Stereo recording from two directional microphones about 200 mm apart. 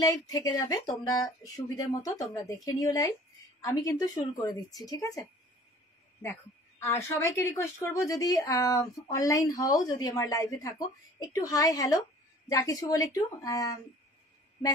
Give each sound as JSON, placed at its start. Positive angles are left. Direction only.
{"t": 0.0, "sound": "a woman's voice", "side_deg": 20}
{"t": 6.8, "sound": "a woman's voice", "side_deg": 15}